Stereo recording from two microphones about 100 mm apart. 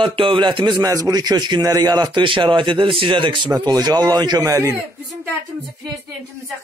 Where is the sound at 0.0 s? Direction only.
60° right (ahead or behind).